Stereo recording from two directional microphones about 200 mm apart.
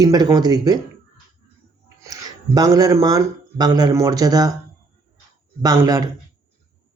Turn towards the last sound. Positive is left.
turn(degrees=-20)  # may be behind; listen again after turning